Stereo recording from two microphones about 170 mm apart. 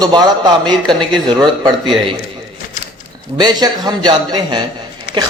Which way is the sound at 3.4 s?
25° right (ahead or behind).